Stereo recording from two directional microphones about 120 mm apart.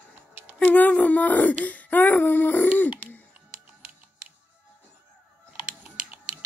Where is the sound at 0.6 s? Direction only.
15° left (ahead or behind).